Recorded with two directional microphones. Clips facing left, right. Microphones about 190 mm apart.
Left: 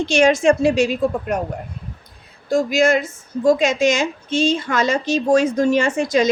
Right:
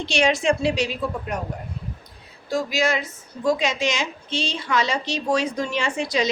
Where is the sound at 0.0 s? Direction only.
45° left (ahead or behind).